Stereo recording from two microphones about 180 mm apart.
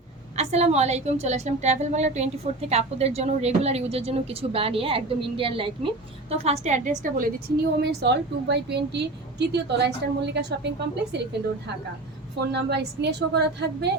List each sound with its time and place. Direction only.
0.3 s a woman's voice: 40° right (ahead or behind)
7.0 s a woman's voice: 50° right (ahead or behind); by 11.2 s 70° right (ahead or behind)
12.5 s a woman's voice: 70° right (ahead or behind)